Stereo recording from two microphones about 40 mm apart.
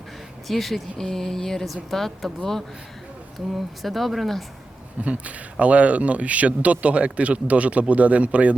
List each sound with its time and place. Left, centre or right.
0.4 s speech: centre
0.9 s speech: centre
5.0 s speech: right